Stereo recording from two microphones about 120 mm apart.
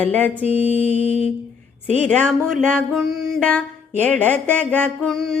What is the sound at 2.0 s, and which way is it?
Speech, 10° left (ahead or behind).